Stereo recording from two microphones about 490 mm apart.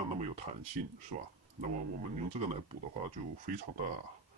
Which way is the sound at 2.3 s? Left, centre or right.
Centre.